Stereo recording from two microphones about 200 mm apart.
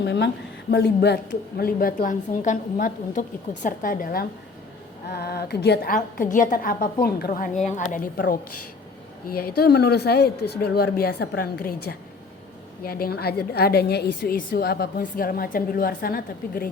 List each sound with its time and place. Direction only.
0.0 s a woman's voice: 60° left (ahead or behind)
5.9 s a woman's voice: 40° left (ahead or behind)